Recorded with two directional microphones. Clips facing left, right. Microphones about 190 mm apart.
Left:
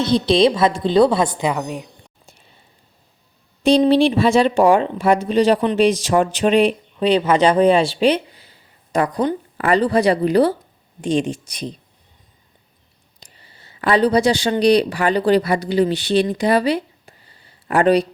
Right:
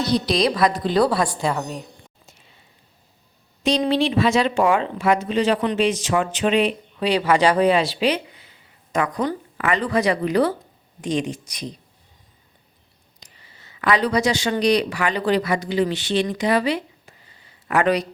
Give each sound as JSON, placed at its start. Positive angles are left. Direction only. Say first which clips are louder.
{"t": 0.0, "sound": "a woman's voice", "louder": "left 5 dB", "side_deg": 25}
{"t": 3.6, "sound": "speech", "louder": "left 6 dB", "side_deg": 30}
{"t": 7.0, "sound": "a woman's voice", "louder": "left 3 dB", "side_deg": 20}
{"t": 13.1, "sound": "speech", "louder": "left 2 dB", "side_deg": 30}